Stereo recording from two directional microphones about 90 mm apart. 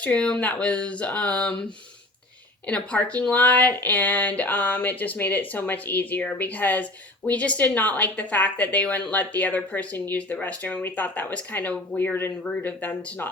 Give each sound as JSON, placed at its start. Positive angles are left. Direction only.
{"t": 0.0, "sound": "a woman's voice", "side_deg": 15}
{"t": 2.6, "sound": "a woman's voice", "side_deg": 15}